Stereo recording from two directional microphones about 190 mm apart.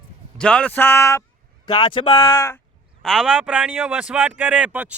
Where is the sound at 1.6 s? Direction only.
25° left (ahead or behind).